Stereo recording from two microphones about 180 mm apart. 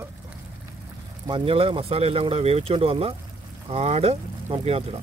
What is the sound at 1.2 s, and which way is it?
Speech, 30° right (ahead or behind).